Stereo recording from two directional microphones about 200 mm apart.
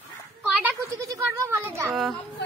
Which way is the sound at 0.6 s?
15° right (ahead or behind).